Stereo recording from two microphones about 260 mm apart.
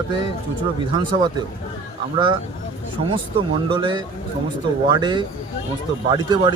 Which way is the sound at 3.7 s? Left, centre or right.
Centre.